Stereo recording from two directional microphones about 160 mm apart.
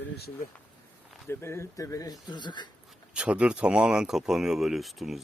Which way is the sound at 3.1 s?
5° right (ahead or behind).